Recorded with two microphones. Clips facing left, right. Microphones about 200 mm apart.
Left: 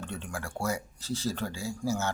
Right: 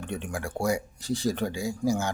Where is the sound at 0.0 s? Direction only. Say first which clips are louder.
Right 5 dB; 15° right (ahead or behind).